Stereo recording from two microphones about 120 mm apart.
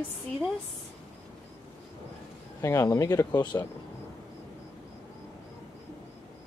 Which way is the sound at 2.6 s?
25° left (ahead or behind).